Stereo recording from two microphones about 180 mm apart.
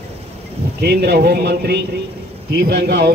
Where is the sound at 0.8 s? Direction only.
60° right (ahead or behind).